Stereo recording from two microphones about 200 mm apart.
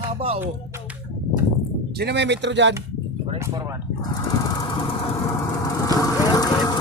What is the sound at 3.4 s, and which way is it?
Speech, 15° right (ahead or behind).